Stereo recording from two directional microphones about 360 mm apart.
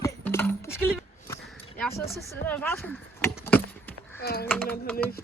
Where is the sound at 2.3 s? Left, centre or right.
Centre.